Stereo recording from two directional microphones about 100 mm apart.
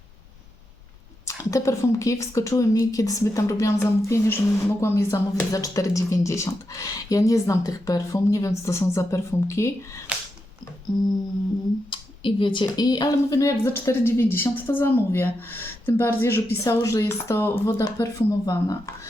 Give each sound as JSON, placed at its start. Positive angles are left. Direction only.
{"t": 1.2, "sound": "speech", "side_deg": 35}
{"t": 10.9, "sound": "speech", "side_deg": 45}
{"t": 11.9, "sound": "speech", "side_deg": 55}
{"t": 13.7, "sound": "a woman's voice", "side_deg": 25}